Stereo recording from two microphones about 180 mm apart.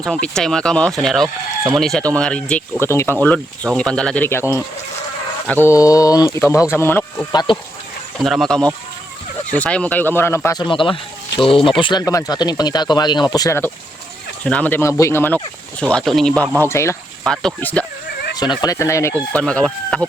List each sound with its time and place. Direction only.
0.0 s speech: 5° left (ahead or behind)
8.2 s speech: centre (ahead or behind)
17.2 s speech: 5° left (ahead or behind)